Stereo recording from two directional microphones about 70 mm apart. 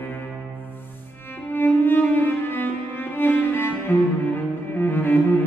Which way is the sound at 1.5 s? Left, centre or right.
Left.